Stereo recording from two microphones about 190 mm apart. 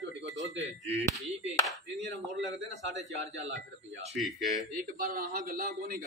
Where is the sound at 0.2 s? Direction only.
70° right (ahead or behind).